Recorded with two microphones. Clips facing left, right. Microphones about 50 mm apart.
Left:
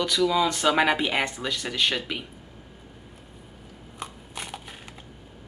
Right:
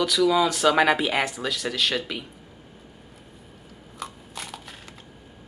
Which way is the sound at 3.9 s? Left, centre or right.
Left.